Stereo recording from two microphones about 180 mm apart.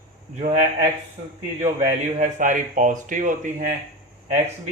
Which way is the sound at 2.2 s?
45° right (ahead or behind).